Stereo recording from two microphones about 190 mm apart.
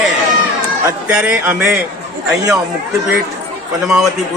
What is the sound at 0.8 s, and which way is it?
Speech, 10° right (ahead or behind).